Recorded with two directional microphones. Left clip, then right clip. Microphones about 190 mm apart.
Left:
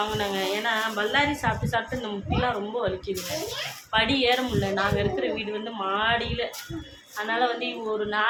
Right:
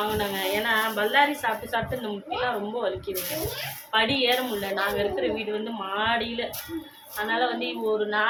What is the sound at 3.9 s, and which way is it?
A woman's voice, 20° left (ahead or behind).